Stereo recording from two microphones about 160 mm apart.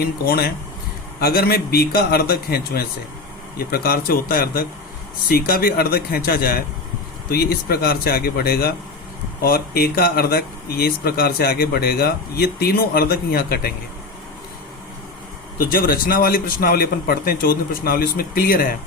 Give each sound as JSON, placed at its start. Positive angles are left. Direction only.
{"t": 0.0, "sound": "speech", "side_deg": 70}
{"t": 15.7, "sound": "speech", "side_deg": 65}